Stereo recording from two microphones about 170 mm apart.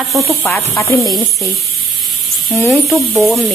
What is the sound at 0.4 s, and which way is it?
Speech, 15° left (ahead or behind).